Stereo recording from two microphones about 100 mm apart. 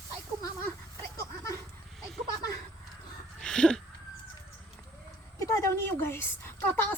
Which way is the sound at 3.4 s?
10° left (ahead or behind).